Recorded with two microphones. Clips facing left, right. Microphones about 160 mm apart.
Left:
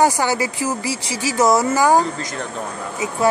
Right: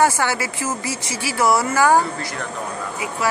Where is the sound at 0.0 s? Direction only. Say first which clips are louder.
Left 2 dB; 15° left (ahead or behind).